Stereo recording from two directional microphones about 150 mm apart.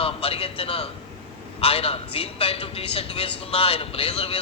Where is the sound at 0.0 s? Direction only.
40° left (ahead or behind).